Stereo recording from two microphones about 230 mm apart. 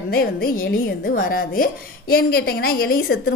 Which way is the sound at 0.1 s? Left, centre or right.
Left.